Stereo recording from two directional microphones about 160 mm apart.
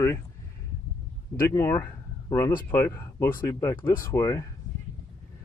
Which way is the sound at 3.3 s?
15° left (ahead or behind).